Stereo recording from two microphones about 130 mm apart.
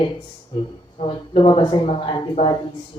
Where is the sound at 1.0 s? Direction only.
40° left (ahead or behind).